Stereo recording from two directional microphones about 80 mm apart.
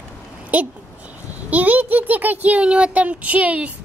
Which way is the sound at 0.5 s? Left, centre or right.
Centre.